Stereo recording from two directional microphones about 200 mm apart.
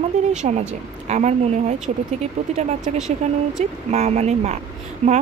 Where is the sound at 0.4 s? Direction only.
35° right (ahead or behind).